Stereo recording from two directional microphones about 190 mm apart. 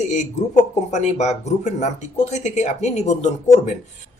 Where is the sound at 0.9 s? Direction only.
35° left (ahead or behind).